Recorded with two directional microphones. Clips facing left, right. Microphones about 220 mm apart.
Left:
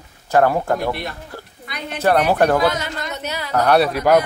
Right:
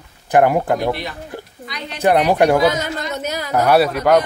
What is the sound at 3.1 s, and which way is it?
Speech, 45° right (ahead or behind).